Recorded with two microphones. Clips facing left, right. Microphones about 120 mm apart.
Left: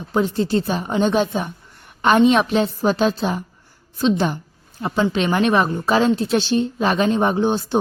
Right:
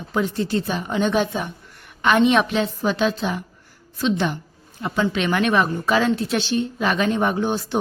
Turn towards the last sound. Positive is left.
turn(degrees=25)  # may be behind; listen again after turning